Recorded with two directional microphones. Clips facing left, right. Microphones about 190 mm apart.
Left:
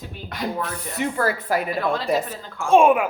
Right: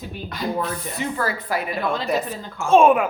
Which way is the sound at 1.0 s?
50° left (ahead or behind).